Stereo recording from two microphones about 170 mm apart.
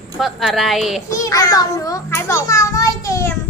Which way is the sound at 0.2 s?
Centre (ahead or behind).